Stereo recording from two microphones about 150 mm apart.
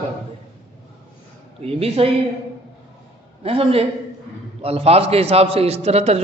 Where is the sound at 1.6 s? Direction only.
40° right (ahead or behind).